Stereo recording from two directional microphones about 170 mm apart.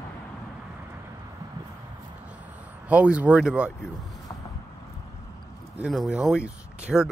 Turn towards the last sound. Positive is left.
turn(degrees=-5)  # may be behind; listen again after turning